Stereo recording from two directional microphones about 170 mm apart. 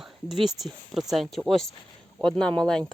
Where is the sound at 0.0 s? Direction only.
Centre (ahead or behind).